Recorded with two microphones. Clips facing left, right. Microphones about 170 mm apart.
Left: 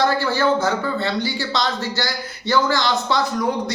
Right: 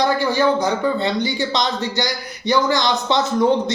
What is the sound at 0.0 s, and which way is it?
A man's voice, 15° right (ahead or behind).